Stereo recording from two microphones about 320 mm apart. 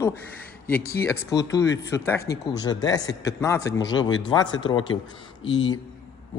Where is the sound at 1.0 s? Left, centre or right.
Centre.